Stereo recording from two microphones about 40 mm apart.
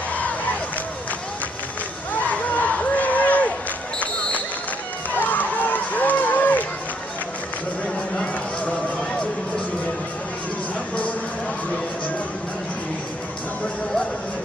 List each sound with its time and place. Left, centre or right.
2.2 s a sound: left
5.1 s run: left
8.2 s run: left